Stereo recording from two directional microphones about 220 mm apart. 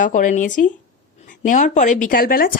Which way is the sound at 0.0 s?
35° left (ahead or behind).